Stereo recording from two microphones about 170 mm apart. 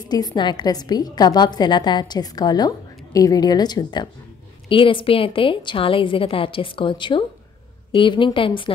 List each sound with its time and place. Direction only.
0.0 s a woman's voice: 25° left (ahead or behind)